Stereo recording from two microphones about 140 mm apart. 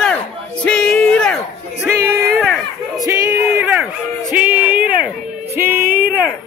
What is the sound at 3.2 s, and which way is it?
Music, 15° right (ahead or behind).